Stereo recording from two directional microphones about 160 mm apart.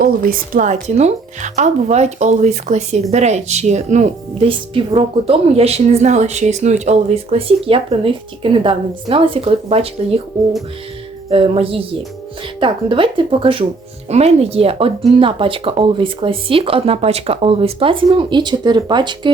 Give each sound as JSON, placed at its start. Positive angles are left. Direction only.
{"t": 0.0, "sound": "speech", "side_deg": -60}
{"t": 11.3, "sound": "speech", "side_deg": -35}